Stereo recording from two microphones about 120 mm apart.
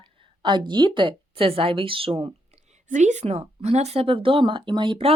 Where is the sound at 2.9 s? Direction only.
85° right.